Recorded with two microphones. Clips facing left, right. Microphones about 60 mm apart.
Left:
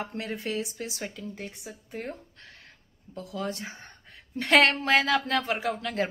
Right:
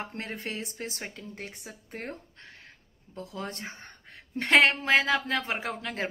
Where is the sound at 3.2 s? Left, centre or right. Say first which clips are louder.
Left 4 dB; right.